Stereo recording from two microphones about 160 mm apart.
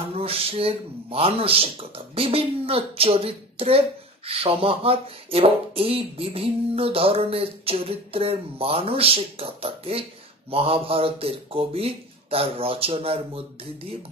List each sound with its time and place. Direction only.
0.0 s speech: 35° right (ahead or behind)